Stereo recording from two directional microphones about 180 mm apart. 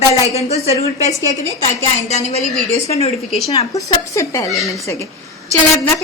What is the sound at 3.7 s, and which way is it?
Speech, 15° left (ahead or behind).